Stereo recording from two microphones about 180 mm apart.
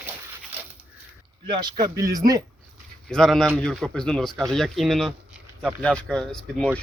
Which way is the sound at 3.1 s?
Centre (ahead or behind).